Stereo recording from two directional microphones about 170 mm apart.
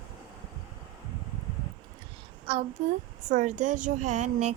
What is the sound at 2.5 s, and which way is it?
Speech, 30° right (ahead or behind).